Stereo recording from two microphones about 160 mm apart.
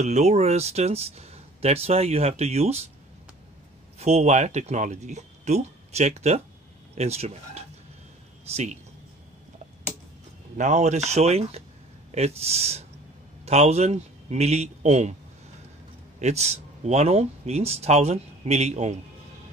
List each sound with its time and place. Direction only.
0.0 s speech: 45° right (ahead or behind)
4.0 s speech: 45° right (ahead or behind)
10.6 s speech: 45° right (ahead or behind)
16.2 s speech: 45° right (ahead or behind)